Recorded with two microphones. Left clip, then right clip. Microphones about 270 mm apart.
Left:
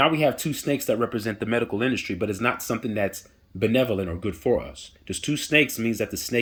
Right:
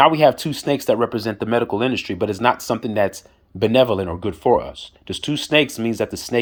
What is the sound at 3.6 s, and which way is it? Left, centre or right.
Speech, centre.